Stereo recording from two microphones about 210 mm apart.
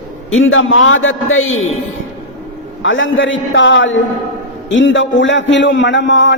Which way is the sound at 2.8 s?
65° left (ahead or behind).